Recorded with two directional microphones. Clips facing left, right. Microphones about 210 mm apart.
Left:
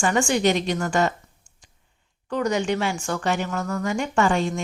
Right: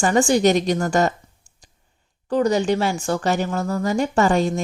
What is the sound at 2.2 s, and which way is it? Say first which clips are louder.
A woman's voice: right 5 dB; 35° right (ahead or behind).